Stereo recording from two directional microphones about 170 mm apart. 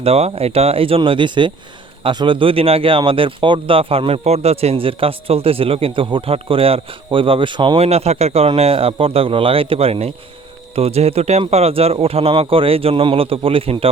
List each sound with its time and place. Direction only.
0.0 s speech: 35° right (ahead or behind)